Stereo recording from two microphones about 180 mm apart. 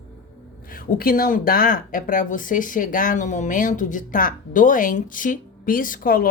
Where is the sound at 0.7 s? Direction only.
55° left (ahead or behind).